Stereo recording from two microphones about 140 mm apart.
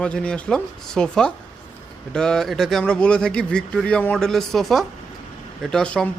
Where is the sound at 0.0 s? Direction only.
5° left (ahead or behind).